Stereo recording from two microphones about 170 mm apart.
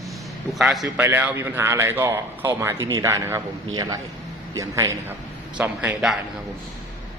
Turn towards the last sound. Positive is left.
turn(degrees=-5)  # may be behind; listen again after turning